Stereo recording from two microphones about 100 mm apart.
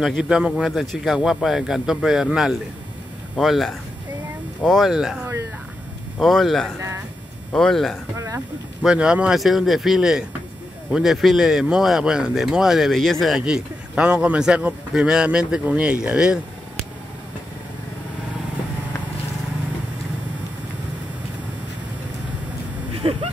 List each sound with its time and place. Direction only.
0.0 s speech: 5° right (ahead or behind)
8.8 s speech: 10° right (ahead or behind)
22.9 s a sound: 70° right (ahead or behind)